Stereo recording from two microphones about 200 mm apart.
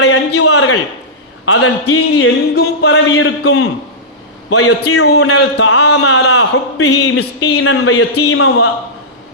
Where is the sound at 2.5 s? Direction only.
55° left (ahead or behind); by 3.3 s 75° left (ahead or behind).